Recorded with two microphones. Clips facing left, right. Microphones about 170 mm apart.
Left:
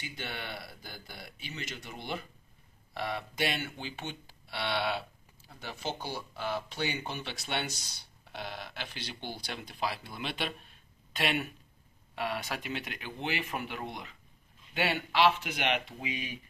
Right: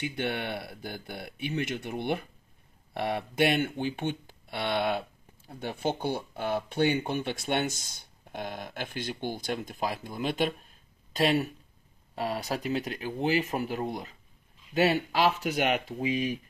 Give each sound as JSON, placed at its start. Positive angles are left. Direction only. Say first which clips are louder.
{"t": 0.0, "sound": "speech", "louder": "right 9 dB", "side_deg": -60}